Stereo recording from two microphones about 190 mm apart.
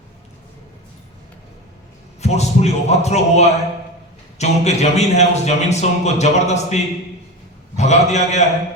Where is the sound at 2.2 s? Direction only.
35° left (ahead or behind).